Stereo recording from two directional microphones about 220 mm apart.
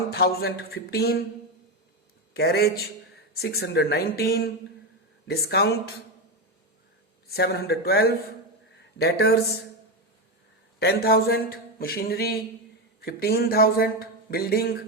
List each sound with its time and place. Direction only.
0.1 s speech: 45° left (ahead or behind)
2.3 s speech: 45° left (ahead or behind)
7.3 s speech: 45° left (ahead or behind)
10.8 s speech: 45° left (ahead or behind)